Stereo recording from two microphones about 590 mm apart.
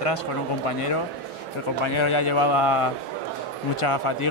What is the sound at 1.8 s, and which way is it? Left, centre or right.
Speech, left.